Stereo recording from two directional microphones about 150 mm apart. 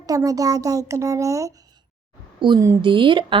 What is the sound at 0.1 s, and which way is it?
Speech, 25° right (ahead or behind).